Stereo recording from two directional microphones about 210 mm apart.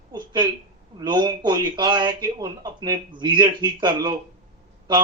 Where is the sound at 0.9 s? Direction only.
20° right (ahead or behind).